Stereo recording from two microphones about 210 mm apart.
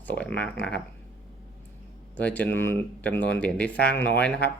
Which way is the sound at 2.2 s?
5° left (ahead or behind).